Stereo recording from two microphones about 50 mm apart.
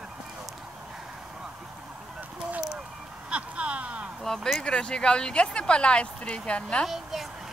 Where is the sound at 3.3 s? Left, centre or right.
Right.